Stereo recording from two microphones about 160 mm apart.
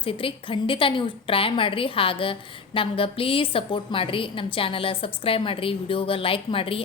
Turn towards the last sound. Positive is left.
turn(degrees=35)  # may be behind; listen again after turning